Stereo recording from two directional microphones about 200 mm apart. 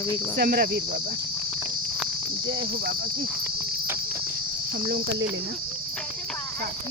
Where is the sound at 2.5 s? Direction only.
55° right (ahead or behind).